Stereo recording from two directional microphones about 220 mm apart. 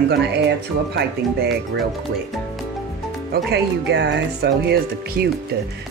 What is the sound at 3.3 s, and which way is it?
Speech, 50° right (ahead or behind).